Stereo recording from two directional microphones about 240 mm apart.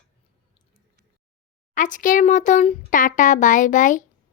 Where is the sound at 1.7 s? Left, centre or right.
Left.